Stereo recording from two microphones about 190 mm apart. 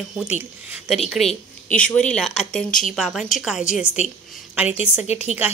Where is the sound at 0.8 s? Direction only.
Centre (ahead or behind).